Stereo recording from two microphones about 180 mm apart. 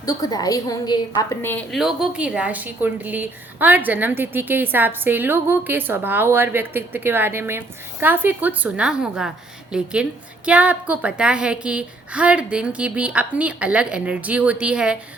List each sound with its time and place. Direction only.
0.0 s a woman's voice: 20° left (ahead or behind)
1.5 s a woman's voice: 5° left (ahead or behind)